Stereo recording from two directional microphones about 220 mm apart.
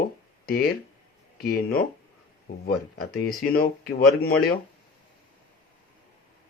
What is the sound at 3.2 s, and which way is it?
Speech, 45° left (ahead or behind).